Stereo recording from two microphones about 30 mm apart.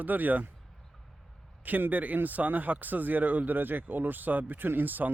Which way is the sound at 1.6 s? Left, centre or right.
Right.